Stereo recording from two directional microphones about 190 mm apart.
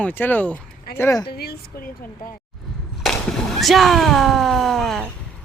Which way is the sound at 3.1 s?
5° left (ahead or behind).